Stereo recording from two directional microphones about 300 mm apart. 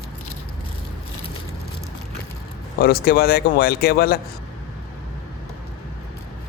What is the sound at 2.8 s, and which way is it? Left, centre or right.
Speech, left.